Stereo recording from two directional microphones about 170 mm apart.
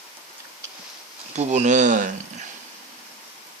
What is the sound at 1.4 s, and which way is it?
Speech, 45° right (ahead or behind).